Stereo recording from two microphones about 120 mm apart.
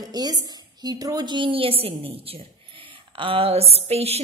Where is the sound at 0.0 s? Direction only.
35° right (ahead or behind).